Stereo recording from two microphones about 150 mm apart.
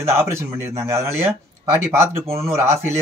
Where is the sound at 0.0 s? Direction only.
15° right (ahead or behind).